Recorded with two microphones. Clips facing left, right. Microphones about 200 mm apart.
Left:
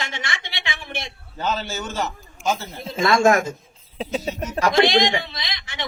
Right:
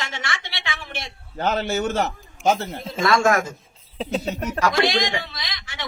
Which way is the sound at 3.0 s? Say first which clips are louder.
Left 2 dB; 20° left (ahead or behind).